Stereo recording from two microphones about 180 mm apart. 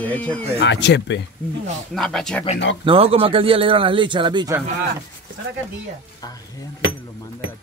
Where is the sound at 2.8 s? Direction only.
30° right (ahead or behind).